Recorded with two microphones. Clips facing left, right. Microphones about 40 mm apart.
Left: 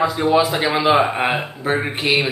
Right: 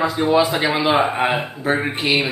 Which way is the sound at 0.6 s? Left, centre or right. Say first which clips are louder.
Left 1 dB; centre.